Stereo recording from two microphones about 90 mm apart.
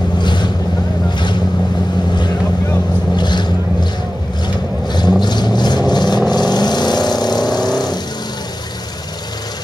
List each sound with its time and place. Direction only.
0.2 s boat: 55° left (ahead or behind)
3.2 s vehicle: 55° left (ahead or behind)
4.8 s vehicle: 55° left (ahead or behind)